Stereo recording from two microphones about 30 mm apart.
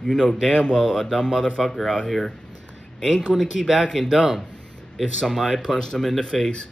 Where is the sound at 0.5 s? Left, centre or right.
Left.